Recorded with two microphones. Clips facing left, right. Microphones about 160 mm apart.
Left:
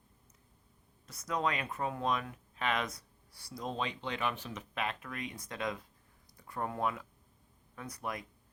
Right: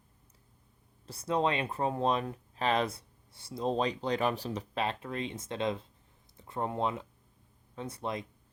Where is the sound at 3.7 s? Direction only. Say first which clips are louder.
Right 7 dB; 35° right (ahead or behind).